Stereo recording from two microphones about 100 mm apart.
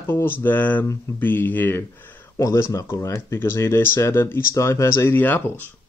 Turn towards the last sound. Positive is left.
turn(degrees=20)  # may be behind; listen again after turning